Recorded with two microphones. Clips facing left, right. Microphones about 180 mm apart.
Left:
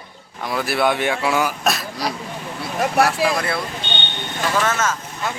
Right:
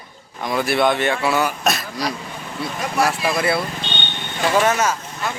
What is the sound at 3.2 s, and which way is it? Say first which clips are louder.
Speech: right 2 dB; 5° right (ahead or behind).